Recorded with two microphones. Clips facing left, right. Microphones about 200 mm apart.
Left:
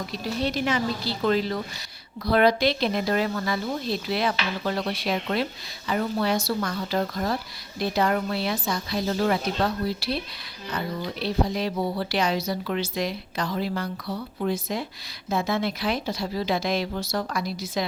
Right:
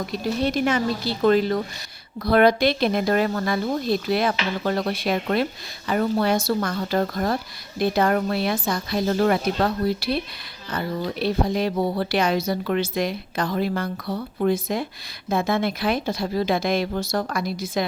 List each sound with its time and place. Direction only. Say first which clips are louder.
0.4 s speech: right 3 dB; 50° right (ahead or behind)